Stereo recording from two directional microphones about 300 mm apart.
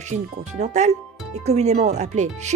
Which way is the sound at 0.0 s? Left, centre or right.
Right.